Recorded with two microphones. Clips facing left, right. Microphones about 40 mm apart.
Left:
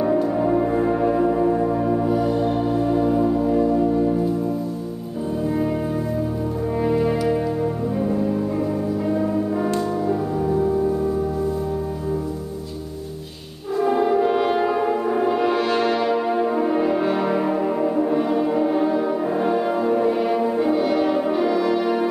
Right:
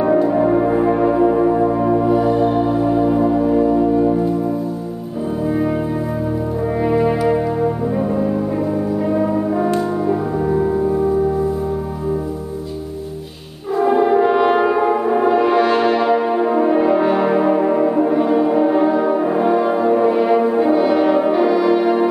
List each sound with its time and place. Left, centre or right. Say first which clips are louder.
0.0 s music: right 5 dB; right
6.8 s brass instrument: right 4 dB; centre
13.7 s brass instrument: right 5 dB; centre